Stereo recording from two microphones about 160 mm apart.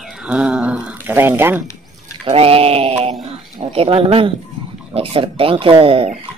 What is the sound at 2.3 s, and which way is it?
Speech, 35° right (ahead or behind).